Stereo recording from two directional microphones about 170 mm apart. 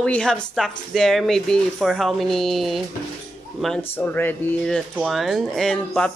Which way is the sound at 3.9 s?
10° left (ahead or behind).